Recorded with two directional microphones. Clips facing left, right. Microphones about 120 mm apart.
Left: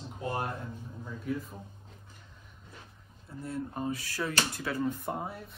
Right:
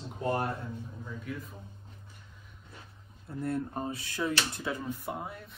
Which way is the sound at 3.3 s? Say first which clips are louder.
Right 4 dB; 55° right (ahead or behind).